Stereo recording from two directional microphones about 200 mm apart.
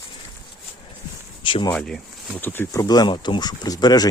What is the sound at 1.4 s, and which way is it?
Speech, 25° left (ahead or behind).